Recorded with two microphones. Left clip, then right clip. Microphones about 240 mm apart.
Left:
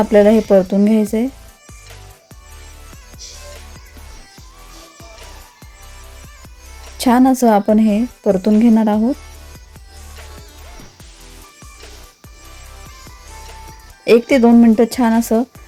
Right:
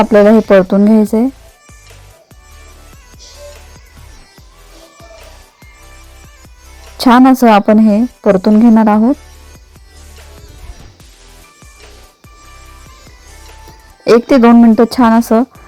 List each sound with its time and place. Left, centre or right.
0.0 s speech: right
0.3 s speech: right
6.9 s speech: centre
14.0 s speech: centre